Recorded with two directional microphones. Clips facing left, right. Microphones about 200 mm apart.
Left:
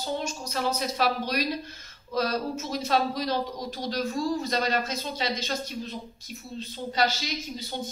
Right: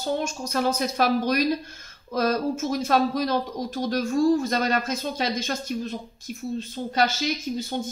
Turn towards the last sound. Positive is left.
turn(degrees=-50)  # may be behind; listen again after turning